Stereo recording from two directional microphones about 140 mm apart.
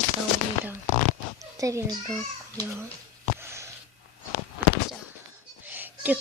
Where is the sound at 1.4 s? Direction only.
25° right (ahead or behind).